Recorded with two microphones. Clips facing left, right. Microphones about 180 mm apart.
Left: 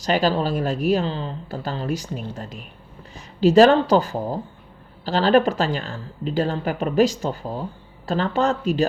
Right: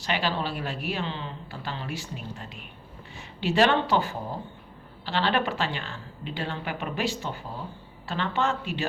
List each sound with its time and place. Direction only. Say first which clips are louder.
0.0 s a woman's voice: left 8 dB; 40° left (ahead or behind)